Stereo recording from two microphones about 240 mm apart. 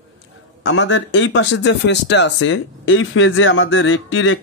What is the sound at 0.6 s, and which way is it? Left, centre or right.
Speech, left.